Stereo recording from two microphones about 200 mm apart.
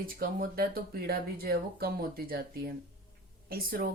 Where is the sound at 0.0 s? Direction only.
45° right (ahead or behind).